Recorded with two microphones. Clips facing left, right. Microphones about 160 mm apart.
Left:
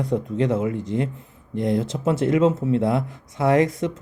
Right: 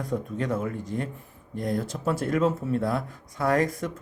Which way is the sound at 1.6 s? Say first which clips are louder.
Left 6 dB; 25° left (ahead or behind).